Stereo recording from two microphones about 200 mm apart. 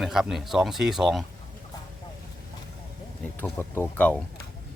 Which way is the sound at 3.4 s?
10° left (ahead or behind).